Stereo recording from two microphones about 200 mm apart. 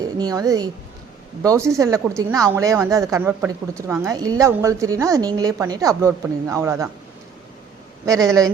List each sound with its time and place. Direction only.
0.2 s a woman's voice: 20° right (ahead or behind)
8.0 s a woman's voice: 15° right (ahead or behind)